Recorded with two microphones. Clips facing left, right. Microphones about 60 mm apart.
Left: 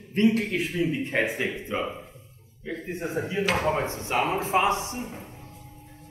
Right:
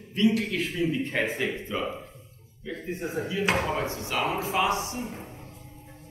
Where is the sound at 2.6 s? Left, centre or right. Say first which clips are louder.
Left 1 dB; left.